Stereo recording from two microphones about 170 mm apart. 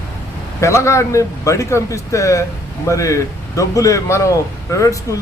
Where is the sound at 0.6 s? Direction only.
15° left (ahead or behind).